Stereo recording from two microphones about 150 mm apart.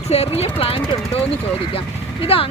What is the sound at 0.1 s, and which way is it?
Speech, 40° left (ahead or behind).